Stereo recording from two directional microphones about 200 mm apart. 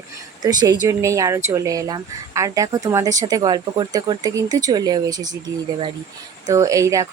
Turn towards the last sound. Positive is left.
turn(degrees=-15)  # may be behind; listen again after turning